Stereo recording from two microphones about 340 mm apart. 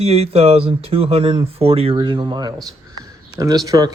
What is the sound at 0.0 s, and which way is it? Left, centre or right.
Speech, centre.